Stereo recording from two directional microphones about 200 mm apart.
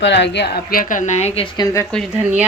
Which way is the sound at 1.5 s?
20° left (ahead or behind).